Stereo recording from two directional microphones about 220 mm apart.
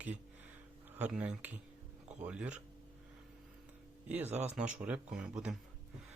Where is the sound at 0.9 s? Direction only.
5° right (ahead or behind).